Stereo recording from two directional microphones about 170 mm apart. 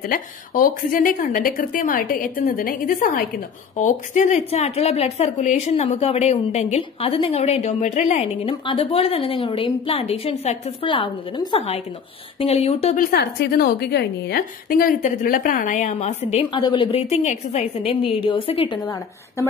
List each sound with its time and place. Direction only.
0.1 s a woman's voice: 55° left (ahead or behind); by 12.9 s 35° left (ahead or behind)
13.1 s a woman's voice: 75° left (ahead or behind); by 16.3 s 40° left (ahead or behind)
16.5 s a woman's voice: 25° left (ahead or behind)
18.8 s a woman's voice: 20° left (ahead or behind)